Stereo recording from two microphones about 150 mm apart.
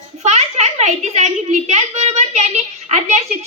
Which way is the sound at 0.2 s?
50° right (ahead or behind).